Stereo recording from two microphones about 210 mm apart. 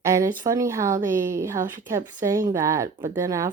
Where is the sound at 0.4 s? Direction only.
15° right (ahead or behind).